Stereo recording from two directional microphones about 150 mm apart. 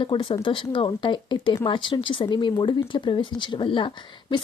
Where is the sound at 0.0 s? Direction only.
35° left (ahead or behind).